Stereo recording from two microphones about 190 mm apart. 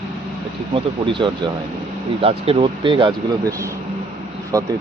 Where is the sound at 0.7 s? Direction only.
25° right (ahead or behind).